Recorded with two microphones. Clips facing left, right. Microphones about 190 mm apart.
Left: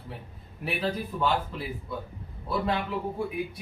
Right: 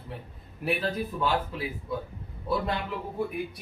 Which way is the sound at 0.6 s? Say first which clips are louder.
Right 1 dB; centre (ahead or behind).